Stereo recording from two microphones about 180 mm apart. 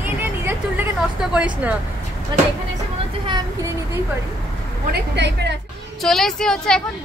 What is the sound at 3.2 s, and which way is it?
Speech, 25° right (ahead or behind).